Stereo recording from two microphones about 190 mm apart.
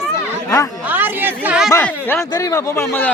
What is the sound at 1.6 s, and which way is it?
Speech, 10° left (ahead or behind).